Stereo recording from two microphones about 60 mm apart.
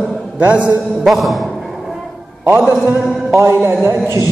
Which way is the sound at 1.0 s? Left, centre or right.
Centre.